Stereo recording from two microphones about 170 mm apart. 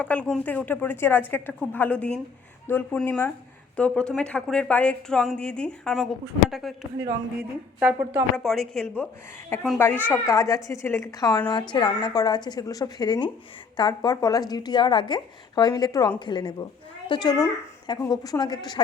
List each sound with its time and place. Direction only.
0.0 s a woman's voice: 10° left (ahead or behind)
7.8 s a woman's voice: 10° right (ahead or behind)
8.4 s a woman's voice: centre (ahead or behind); by 18.8 s 25° left (ahead or behind)